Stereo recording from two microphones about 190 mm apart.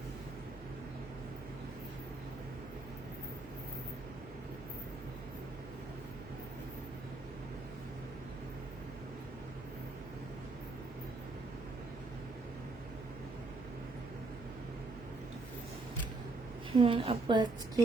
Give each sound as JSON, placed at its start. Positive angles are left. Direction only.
{"t": 16.7, "sound": "a woman's voice", "side_deg": -25}